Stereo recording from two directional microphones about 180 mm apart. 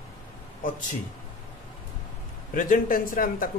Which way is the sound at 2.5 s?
45° left (ahead or behind).